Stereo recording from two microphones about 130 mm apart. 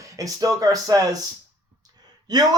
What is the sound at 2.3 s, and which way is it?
Speech, 30° right (ahead or behind).